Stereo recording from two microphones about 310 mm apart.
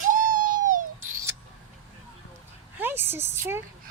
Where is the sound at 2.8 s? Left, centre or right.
Centre.